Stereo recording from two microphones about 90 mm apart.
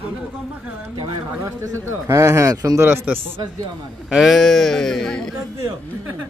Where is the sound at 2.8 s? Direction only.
20° right (ahead or behind).